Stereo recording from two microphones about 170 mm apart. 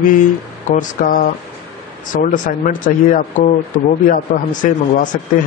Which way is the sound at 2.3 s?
50° left (ahead or behind).